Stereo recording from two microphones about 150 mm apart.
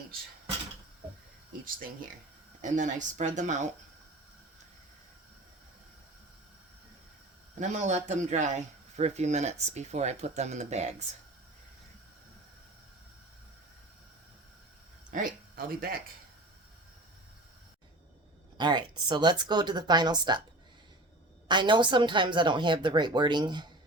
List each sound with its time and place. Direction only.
2.6 s speech: 55° right (ahead or behind)
7.6 s speech: 50° right (ahead or behind)
15.1 s speech: 70° right (ahead or behind)
18.5 s speech: 30° right (ahead or behind)
21.4 s a woman's voice: 30° right (ahead or behind)